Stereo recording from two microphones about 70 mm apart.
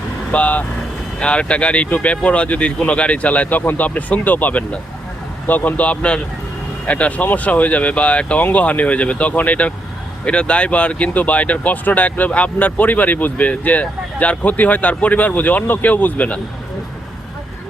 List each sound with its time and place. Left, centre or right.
0.3 s speech: centre